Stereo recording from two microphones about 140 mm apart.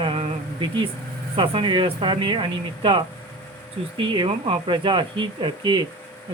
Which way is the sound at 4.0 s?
35° right (ahead or behind).